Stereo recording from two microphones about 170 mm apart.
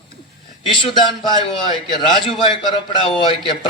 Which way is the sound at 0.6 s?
30° left (ahead or behind).